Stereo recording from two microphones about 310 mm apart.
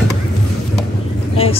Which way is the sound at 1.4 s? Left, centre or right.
Centre.